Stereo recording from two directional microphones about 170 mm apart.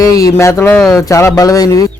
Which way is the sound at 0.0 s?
20° left (ahead or behind).